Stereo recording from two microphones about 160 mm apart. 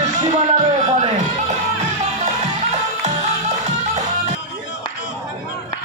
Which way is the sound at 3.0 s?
45° right (ahead or behind).